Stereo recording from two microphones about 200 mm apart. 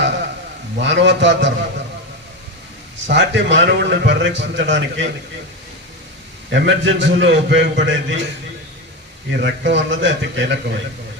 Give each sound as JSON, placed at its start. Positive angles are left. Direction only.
{"t": 0.8, "sound": "a man's voice", "side_deg": -65}
{"t": 3.1, "sound": "a man's voice", "side_deg": -60}
{"t": 6.5, "sound": "a man's voice", "side_deg": -65}
{"t": 9.4, "sound": "a man's voice", "side_deg": -65}